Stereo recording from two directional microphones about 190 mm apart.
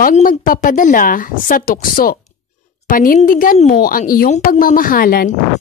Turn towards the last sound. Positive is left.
turn(degrees=50)  # may be behind; listen again after turning